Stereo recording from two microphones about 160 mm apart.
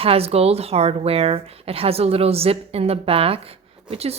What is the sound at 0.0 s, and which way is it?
A woman's voice, 40° right (ahead or behind).